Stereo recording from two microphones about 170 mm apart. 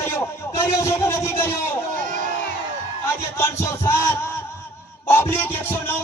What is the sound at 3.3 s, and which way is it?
Speech, 15° left (ahead or behind).